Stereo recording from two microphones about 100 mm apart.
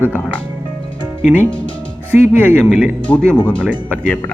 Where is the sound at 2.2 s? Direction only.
25° right (ahead or behind).